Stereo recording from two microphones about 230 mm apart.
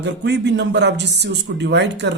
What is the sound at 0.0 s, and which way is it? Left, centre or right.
Speech, right.